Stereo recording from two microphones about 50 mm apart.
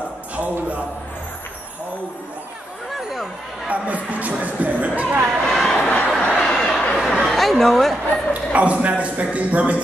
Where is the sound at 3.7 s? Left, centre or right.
Right.